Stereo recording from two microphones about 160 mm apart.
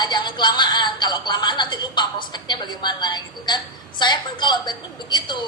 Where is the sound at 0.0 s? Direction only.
30° left (ahead or behind).